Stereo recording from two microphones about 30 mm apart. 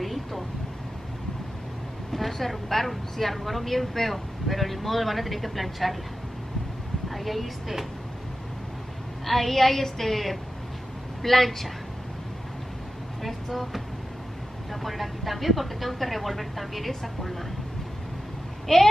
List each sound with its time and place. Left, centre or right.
0.0 s vehicle: centre
2.1 s speech: centre
7.1 s a woman's voice: centre
9.2 s a woman's voice: centre
13.2 s vehicle: centre
14.7 s speech: centre
18.7 s a woman's voice: centre